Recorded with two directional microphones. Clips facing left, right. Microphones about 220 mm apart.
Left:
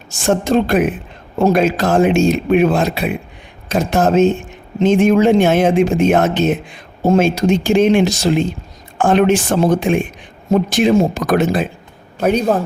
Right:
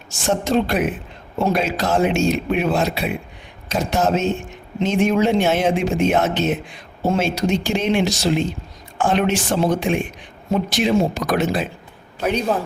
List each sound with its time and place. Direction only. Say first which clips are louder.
0.3 s speech: left 5 dB; 50° left (ahead or behind)